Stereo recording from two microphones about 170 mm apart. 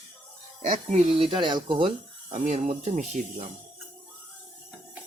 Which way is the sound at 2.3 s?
45° right (ahead or behind).